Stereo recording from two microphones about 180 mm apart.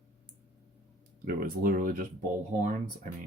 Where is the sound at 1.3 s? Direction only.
55° right (ahead or behind).